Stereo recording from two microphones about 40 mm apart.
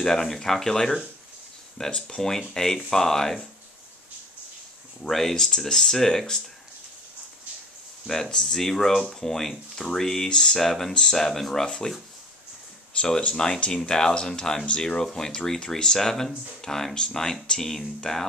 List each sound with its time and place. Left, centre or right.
0.0 s speech: centre
2.0 s speech: centre
5.0 s speech: centre
8.1 s speech: centre
11.1 s speech: centre
13.0 s speech: left